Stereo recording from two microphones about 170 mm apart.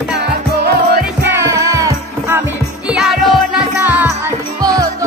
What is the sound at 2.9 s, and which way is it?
Music, 5° right (ahead or behind).